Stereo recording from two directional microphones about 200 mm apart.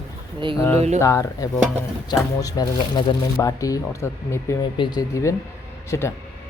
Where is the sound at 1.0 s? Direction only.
15° left (ahead or behind).